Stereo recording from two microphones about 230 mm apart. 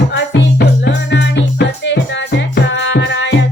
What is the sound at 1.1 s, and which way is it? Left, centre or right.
Music, left.